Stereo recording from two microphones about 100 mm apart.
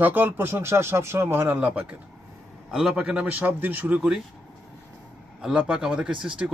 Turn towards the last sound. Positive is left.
turn(degrees=-15)  # may be behind; listen again after turning